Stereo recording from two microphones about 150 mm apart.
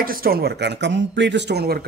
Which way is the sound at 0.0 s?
80° right.